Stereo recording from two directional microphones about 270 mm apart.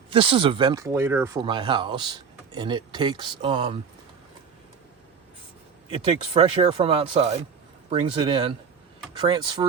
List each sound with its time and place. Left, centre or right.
0.1 s speech: centre
5.9 s speech: centre